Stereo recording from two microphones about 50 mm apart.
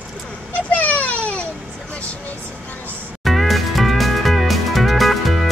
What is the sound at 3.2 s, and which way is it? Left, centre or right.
Music, centre.